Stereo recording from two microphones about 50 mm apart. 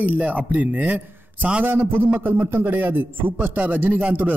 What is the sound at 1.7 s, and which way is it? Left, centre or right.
A man's voice, right.